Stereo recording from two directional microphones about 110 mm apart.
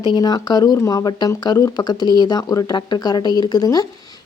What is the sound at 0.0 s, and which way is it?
Speech, 40° left (ahead or behind).